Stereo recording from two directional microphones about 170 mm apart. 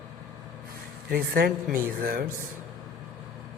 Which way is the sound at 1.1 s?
65° right (ahead or behind).